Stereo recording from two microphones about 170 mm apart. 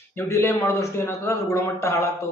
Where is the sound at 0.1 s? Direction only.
15° left (ahead or behind).